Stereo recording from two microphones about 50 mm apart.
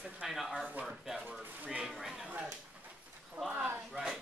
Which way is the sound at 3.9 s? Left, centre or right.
Centre.